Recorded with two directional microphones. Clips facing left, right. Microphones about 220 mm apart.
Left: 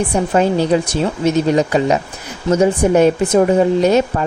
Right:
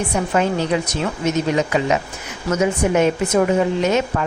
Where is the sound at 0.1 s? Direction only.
35° left (ahead or behind).